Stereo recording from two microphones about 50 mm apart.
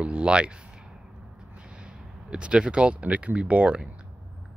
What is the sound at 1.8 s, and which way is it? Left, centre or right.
Speech, centre.